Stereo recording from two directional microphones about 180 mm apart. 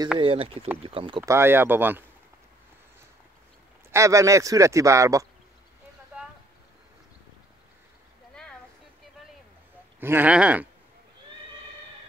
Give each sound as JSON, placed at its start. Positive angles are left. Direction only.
{"t": 0.2, "sound": "speech", "side_deg": -30}
{"t": 1.3, "sound": "speech", "side_deg": -10}
{"t": 3.9, "sound": "speech", "side_deg": -15}
{"t": 9.9, "sound": "speech", "side_deg": -10}